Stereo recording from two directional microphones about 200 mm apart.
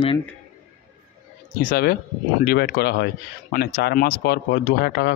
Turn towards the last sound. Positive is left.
turn(degrees=50)  # may be behind; listen again after turning